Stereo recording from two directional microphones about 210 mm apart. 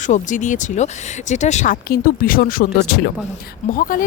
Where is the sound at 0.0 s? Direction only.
35° left (ahead or behind).